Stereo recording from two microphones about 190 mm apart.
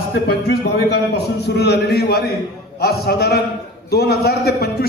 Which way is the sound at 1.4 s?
60° left (ahead or behind).